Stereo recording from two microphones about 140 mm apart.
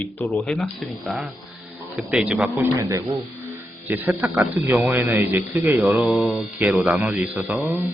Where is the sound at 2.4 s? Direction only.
20° right (ahead or behind).